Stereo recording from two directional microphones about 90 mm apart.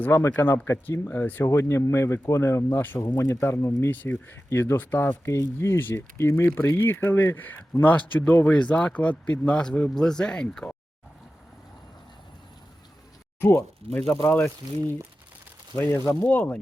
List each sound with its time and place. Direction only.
0.0 s speech: 25° left (ahead or behind); by 10.8 s 10° left (ahead or behind)
13.4 s speech: 25° left (ahead or behind)
16.2 s speech: 15° left (ahead or behind)